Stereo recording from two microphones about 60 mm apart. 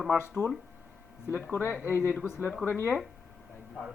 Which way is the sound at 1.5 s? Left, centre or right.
Left.